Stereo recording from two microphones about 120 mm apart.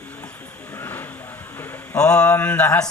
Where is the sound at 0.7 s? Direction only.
20° left (ahead or behind).